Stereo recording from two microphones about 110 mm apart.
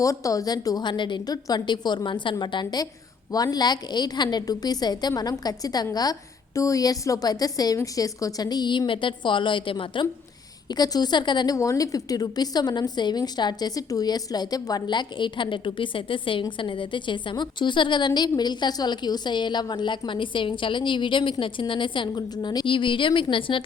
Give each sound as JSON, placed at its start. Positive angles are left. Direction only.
{"t": 0.0, "sound": "a woman's voice", "side_deg": 30}
{"t": 10.7, "sound": "a woman's voice", "side_deg": 35}
{"t": 11.5, "sound": "a woman's voice", "side_deg": 30}